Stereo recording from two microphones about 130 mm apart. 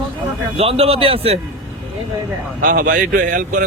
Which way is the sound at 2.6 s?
90° right.